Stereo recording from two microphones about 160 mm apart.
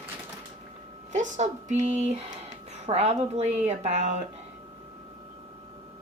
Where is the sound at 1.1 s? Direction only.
50° right (ahead or behind).